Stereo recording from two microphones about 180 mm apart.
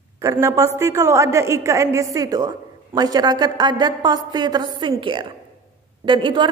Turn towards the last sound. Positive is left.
turn(degrees=-25)  # may be behind; listen again after turning